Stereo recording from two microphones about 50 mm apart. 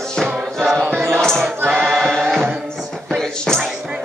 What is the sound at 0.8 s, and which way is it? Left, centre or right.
Music, right.